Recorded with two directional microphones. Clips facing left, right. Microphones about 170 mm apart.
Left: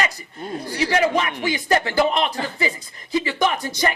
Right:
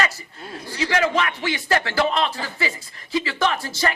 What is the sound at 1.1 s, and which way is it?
Speech, 15° left (ahead or behind).